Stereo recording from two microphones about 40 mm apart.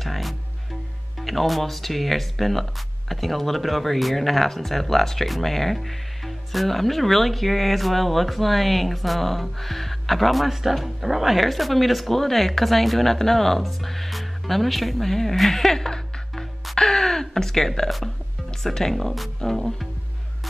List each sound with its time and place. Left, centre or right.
0.0 s music: centre
1.2 s speech: centre